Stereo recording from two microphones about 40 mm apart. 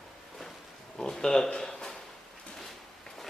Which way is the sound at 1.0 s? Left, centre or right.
Centre.